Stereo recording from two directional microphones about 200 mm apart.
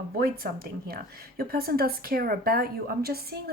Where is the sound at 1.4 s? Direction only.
50° right (ahead or behind).